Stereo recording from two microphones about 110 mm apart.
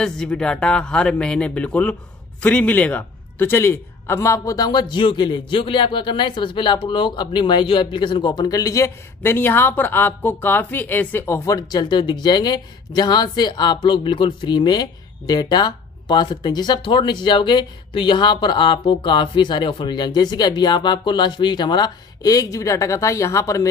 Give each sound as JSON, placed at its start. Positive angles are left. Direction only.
{"t": 0.0, "sound": "a man's voice", "side_deg": 5}